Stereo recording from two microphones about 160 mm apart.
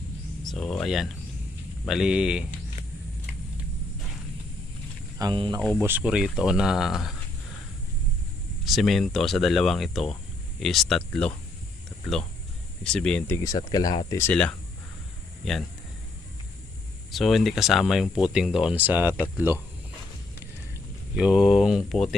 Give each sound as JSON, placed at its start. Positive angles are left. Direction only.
{"t": 0.4, "sound": "speech", "side_deg": 0}
{"t": 5.1, "sound": "speech", "side_deg": -25}
{"t": 6.0, "sound": "speech", "side_deg": -5}
{"t": 8.6, "sound": "speech", "side_deg": 0}
{"t": 12.8, "sound": "speech", "side_deg": 5}
{"t": 17.1, "sound": "speech", "side_deg": 0}
{"t": 21.2, "sound": "speech", "side_deg": -5}